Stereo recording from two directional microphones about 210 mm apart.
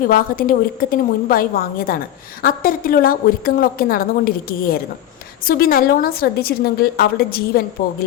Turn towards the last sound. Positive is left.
turn(degrees=45)  # may be behind; listen again after turning